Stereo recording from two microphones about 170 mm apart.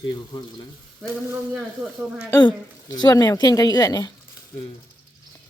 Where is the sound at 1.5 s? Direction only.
5° right (ahead or behind).